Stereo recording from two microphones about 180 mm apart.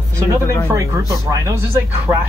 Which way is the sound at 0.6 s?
15° right (ahead or behind).